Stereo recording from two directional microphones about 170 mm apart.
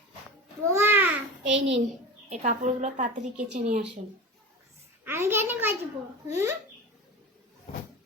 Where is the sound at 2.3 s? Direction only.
45° right (ahead or behind).